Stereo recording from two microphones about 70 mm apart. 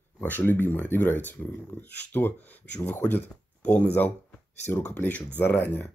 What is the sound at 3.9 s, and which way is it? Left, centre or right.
Speech, left.